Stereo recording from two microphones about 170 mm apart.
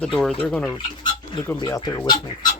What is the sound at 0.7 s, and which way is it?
Speech, 30° left (ahead or behind).